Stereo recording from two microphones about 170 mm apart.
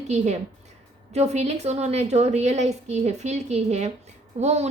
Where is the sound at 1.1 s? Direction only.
40° right (ahead or behind).